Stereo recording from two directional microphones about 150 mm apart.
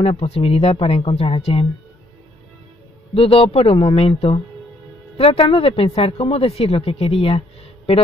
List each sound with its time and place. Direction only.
0.0 s a woman's voice: 40° left (ahead or behind)
3.2 s a woman's voice: 40° left (ahead or behind)